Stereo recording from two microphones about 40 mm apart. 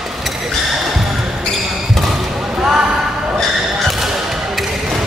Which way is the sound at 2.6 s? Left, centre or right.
Centre.